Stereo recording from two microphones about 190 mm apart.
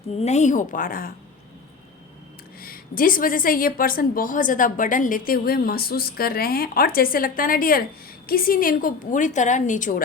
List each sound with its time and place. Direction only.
0.2 s a woman's voice: 35° left (ahead or behind)
2.6 s a woman's voice: 50° left (ahead or behind)